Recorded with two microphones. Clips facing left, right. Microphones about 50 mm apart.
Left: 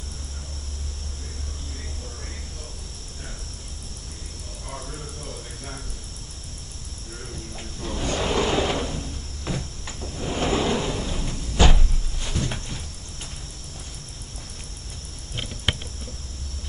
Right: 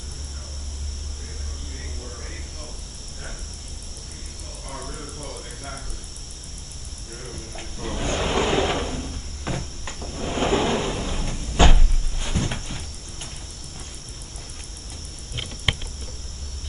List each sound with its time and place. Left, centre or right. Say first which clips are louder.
4.7 s cricket: right 1 dB; centre
7.5 s drawer open or close: right 1 dB; centre
10.0 s a sound: right 2 dB; centre